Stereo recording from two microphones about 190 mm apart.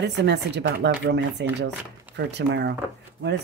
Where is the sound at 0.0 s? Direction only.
65° right (ahead or behind).